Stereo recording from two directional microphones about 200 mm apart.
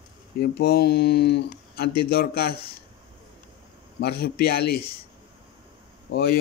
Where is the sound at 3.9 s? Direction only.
55° left (ahead or behind).